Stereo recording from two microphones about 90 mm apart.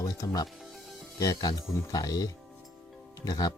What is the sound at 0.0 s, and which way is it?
Speech, 40° left (ahead or behind).